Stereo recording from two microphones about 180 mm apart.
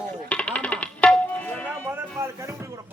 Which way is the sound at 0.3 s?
5° left (ahead or behind).